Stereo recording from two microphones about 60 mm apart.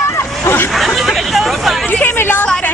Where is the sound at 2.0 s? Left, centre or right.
Left.